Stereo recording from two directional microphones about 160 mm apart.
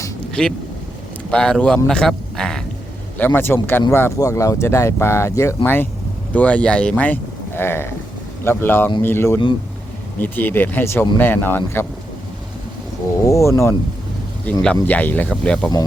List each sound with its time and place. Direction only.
0.4 s a man's voice: 5° left (ahead or behind)
13.2 s speech: 20° left (ahead or behind)
14.8 s speech: 10° left (ahead or behind)